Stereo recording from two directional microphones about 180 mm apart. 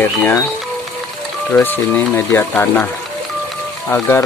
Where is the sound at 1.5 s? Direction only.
10° left (ahead or behind).